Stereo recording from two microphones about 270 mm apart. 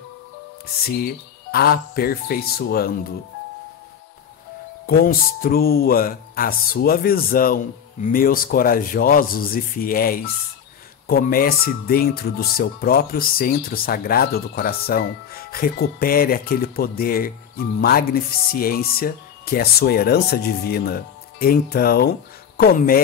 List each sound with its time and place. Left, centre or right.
0.8 s speech: left
4.8 s speech: left